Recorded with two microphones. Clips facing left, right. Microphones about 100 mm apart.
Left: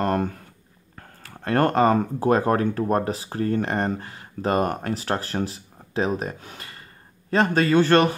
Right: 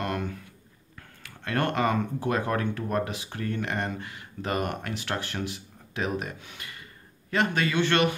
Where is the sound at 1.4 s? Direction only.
40° left (ahead or behind).